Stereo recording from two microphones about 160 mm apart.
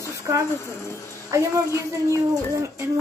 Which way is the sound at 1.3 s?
20° right (ahead or behind).